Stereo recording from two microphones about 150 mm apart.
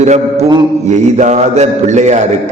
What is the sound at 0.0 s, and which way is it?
Mantra, 50° right (ahead or behind).